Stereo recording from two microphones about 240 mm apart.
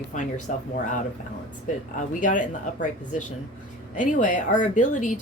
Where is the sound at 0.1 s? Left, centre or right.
Left.